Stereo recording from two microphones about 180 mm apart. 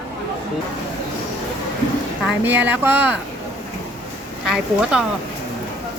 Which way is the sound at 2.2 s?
10° right (ahead or behind).